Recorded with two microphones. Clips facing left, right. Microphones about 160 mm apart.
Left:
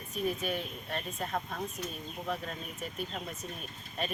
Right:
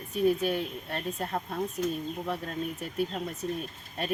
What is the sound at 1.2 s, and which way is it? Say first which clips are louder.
Speech: right 3 dB; 35° right (ahead or behind).